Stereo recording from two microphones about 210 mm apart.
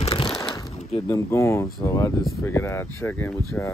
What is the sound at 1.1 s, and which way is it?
Speech, 15° left (ahead or behind).